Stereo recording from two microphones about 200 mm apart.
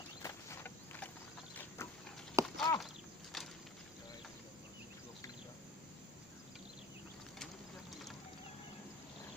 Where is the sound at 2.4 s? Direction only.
15° right (ahead or behind).